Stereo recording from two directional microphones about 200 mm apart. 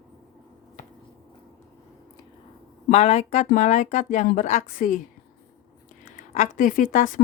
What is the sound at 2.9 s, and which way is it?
Speech, 30° left (ahead or behind).